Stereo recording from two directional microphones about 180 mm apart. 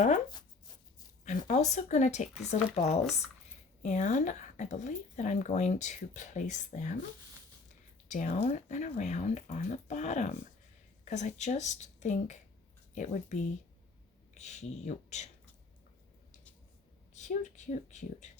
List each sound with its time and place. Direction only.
1.5 s speech: 40° left (ahead or behind)
3.0 s speech: centre (ahead or behind)
3.8 s speech: 40° left (ahead or behind)
8.0 s speech: 40° left (ahead or behind)
17.2 s speech: 40° left (ahead or behind)